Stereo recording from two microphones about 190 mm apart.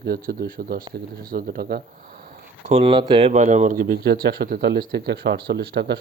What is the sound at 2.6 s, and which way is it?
Speech, 30° right (ahead or behind).